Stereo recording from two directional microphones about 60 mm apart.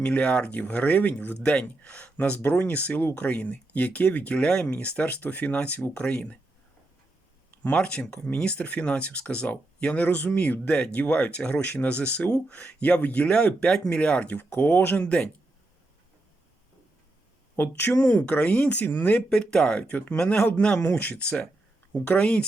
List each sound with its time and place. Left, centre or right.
0.0 s speech: left
7.6 s speech: left
14.6 s speech: left
14.8 s speech: left
17.6 s speech: left
19.3 s speech: centre
19.9 s speech: left